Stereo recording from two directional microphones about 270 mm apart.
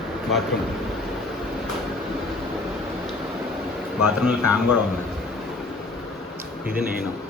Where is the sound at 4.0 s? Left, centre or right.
Centre.